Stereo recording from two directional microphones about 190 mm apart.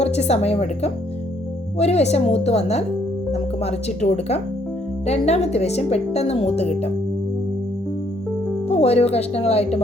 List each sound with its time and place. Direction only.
0.0 s speech: 35° left (ahead or behind)
8.6 s speech: 30° left (ahead or behind)